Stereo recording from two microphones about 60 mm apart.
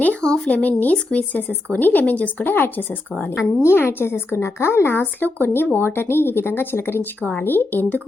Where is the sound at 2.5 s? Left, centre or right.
Left.